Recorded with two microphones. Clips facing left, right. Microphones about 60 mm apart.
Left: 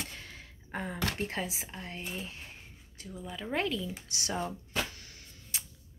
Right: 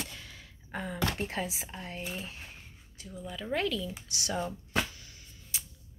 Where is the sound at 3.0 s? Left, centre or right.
Left.